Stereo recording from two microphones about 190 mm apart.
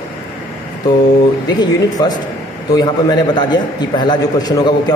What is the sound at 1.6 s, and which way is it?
A man's voice, 20° left (ahead or behind).